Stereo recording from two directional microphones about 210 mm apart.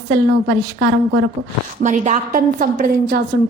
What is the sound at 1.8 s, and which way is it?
A woman's voice, 35° right (ahead or behind).